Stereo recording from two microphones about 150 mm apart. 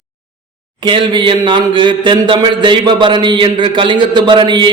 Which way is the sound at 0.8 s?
30° right (ahead or behind).